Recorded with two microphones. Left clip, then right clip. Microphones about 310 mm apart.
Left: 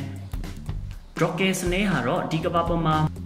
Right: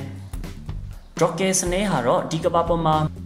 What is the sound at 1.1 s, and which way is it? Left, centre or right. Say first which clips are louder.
A woman's voice: right 3 dB; centre.